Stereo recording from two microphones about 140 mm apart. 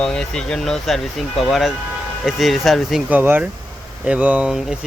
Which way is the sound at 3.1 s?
15° right (ahead or behind).